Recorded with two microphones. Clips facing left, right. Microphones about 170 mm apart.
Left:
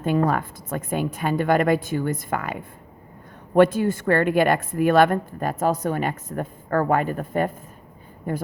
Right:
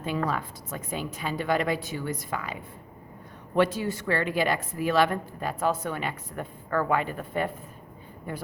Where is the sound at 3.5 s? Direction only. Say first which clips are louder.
Left 7 dB; 50° left (ahead or behind).